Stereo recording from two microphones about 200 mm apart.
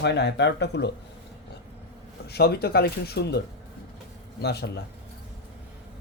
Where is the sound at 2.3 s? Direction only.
55° left (ahead or behind).